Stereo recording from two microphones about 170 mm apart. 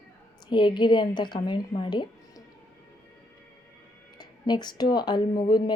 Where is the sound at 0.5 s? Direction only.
25° left (ahead or behind).